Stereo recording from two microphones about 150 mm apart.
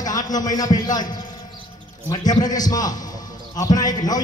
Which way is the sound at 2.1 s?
25° left (ahead or behind).